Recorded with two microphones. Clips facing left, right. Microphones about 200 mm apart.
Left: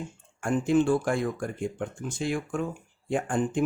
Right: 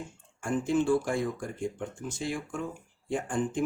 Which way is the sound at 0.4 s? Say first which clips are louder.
Left 3 dB; 55° left (ahead or behind).